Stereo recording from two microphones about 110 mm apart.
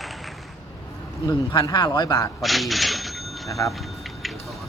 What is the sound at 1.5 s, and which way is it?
Speech, 40° left (ahead or behind).